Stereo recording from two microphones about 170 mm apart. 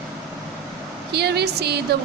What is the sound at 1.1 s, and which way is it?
Speech, 70° right (ahead or behind).